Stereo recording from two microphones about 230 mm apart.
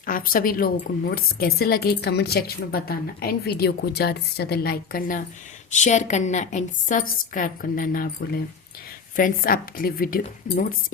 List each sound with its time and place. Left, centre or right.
0.0 s a woman's voice: left